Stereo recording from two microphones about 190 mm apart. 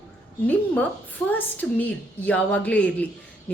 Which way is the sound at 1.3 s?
10° left (ahead or behind).